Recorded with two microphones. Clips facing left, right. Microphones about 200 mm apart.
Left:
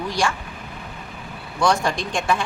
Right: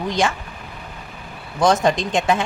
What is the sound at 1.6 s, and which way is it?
Speech, 20° right (ahead or behind).